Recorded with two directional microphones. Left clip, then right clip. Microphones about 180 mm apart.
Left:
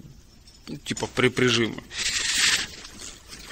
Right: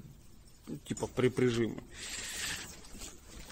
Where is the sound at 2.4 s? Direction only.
20° right (ahead or behind).